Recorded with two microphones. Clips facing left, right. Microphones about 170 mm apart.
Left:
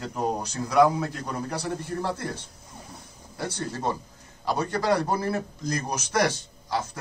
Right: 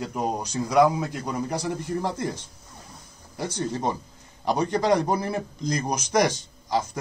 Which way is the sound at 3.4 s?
15° right (ahead or behind).